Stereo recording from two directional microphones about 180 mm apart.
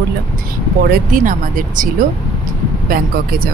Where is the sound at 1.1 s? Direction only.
45° right (ahead or behind).